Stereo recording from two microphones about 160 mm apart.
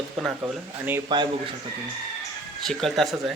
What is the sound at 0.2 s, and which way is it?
Speech, centre (ahead or behind).